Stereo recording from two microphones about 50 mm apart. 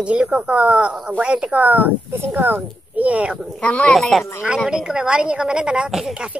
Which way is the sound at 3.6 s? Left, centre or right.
Left.